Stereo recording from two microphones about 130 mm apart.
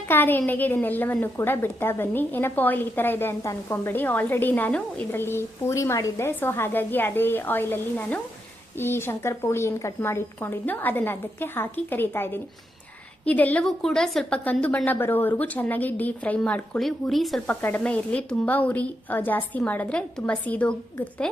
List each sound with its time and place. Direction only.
0.1 s a woman's voice: 15° left (ahead or behind)